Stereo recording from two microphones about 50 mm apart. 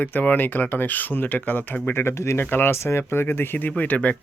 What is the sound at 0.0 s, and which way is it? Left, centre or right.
Speech, left.